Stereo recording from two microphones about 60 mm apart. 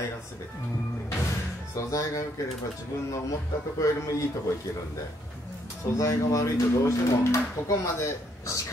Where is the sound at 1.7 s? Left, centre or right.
Left.